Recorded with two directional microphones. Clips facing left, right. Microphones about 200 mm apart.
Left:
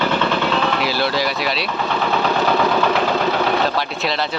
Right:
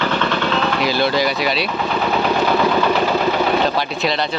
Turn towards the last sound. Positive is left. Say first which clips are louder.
# right 2 dB
turn(degrees=0)  # may be behind; listen again after turning